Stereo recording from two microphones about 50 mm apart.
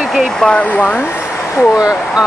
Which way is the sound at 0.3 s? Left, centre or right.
Centre.